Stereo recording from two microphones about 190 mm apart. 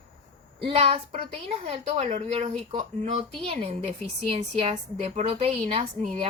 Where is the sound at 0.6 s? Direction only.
30° right (ahead or behind).